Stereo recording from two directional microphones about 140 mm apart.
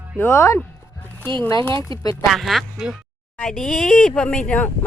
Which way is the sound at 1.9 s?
25° left (ahead or behind).